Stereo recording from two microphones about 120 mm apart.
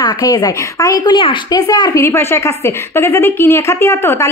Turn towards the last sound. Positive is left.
turn(degrees=25)  # may be behind; listen again after turning